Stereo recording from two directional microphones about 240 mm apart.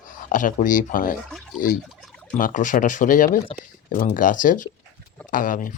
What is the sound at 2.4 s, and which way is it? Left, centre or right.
Speech, left.